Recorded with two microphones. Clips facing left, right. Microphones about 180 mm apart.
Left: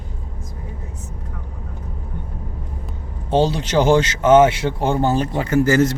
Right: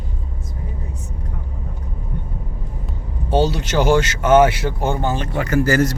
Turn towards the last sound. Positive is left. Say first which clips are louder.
# left 1 dB
turn(degrees=25)  # may be behind; listen again after turning